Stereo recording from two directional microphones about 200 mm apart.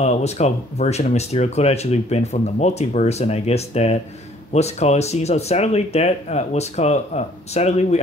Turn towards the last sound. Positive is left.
turn(degrees=35)  # may be behind; listen again after turning